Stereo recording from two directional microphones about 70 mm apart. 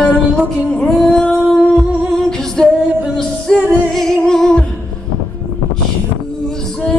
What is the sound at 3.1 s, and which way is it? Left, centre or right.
Singing, centre.